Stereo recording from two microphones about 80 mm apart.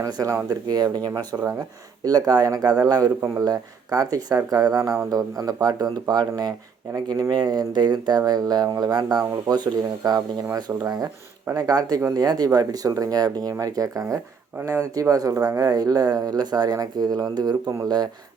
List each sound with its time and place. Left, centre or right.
0.0 s speech: right
0.4 s speech: right